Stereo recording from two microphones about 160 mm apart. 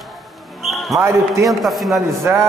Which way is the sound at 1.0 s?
20° right (ahead or behind).